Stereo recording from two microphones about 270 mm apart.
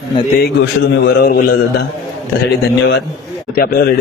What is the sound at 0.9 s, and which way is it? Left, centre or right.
Speech, left.